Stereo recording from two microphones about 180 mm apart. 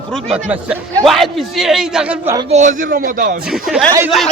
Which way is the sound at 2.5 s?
45° right (ahead or behind).